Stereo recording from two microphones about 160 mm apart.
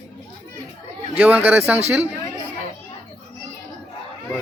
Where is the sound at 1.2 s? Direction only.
10° right (ahead or behind).